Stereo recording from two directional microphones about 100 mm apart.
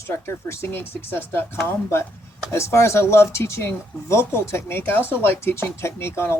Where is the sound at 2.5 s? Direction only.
30° left (ahead or behind).